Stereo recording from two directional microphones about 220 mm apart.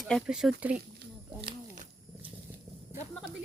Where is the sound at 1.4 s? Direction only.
25° right (ahead or behind).